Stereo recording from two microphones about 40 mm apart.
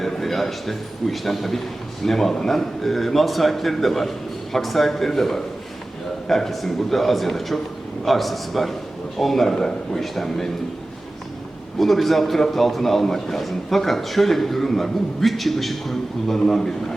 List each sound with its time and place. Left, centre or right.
0.0 s a man's voice: centre
11.8 s a man's voice: centre